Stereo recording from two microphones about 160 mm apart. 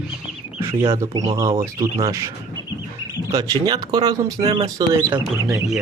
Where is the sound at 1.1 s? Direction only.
25° right (ahead or behind).